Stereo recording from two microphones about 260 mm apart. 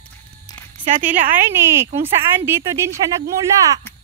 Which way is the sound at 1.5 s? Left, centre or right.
Centre.